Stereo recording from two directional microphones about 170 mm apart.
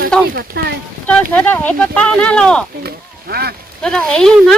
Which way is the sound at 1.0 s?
10° left (ahead or behind).